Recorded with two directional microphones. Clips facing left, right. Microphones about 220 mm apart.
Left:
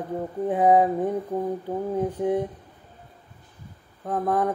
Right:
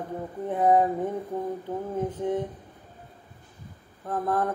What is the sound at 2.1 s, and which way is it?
Speech, 15° left (ahead or behind).